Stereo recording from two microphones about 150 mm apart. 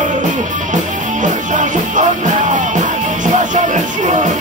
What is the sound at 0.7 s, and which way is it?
Music, 55° right (ahead or behind).